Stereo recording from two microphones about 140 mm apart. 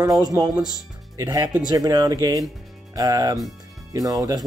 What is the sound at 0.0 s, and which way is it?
Speech, 25° right (ahead or behind).